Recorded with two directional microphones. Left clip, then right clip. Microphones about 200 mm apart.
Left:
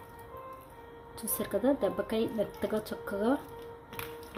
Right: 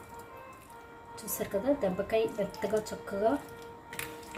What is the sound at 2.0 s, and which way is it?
Speech, 55° left (ahead or behind).